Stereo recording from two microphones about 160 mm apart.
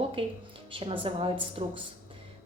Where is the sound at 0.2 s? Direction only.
35° right (ahead or behind).